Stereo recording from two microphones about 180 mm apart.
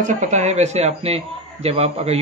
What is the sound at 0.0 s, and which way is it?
A man's voice, 45° right (ahead or behind).